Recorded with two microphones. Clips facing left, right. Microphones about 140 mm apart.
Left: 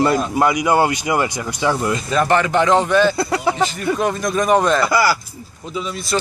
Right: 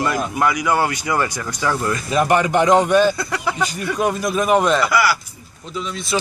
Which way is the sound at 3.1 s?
30° left (ahead or behind).